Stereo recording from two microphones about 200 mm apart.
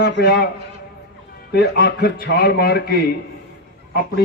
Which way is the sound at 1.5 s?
50° left (ahead or behind).